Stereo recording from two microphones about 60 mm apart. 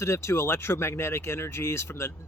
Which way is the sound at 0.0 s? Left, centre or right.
Left.